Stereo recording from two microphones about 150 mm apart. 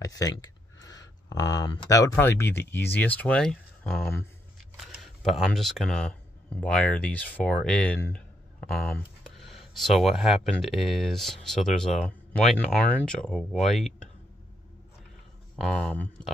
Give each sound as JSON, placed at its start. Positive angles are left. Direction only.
{"t": 0.0, "sound": "speech", "side_deg": 25}
{"t": 15.5, "sound": "speech", "side_deg": 5}